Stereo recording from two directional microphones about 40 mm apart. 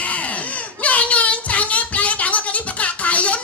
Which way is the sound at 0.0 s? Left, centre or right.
Left.